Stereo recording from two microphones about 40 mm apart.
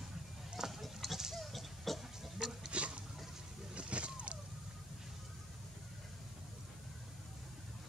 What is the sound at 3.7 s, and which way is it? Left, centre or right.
Vehicle, right.